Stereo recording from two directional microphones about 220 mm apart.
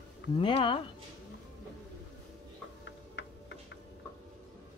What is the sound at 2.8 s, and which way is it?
Tick-tock, 55° left (ahead or behind).